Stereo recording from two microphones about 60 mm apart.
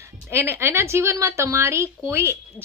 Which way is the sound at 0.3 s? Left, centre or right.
Right.